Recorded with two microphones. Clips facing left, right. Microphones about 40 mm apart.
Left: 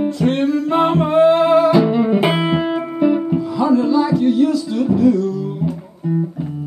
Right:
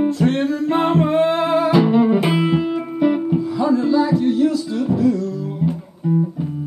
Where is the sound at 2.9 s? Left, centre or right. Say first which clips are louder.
Left 2 dB; centre.